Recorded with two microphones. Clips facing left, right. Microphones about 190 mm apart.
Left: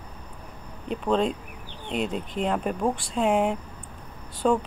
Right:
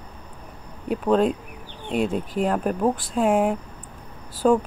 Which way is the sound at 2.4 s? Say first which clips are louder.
Right 3 dB; 5° right (ahead or behind).